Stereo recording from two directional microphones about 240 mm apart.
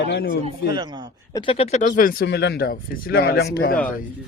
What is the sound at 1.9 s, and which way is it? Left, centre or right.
Speech, left.